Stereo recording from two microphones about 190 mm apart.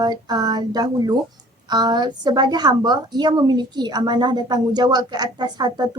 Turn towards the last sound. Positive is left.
turn(degrees=-20)  # may be behind; listen again after turning